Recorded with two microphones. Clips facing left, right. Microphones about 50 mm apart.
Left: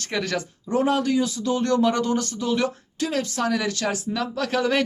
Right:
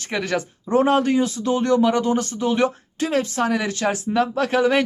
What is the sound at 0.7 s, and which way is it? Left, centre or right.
Speech, right.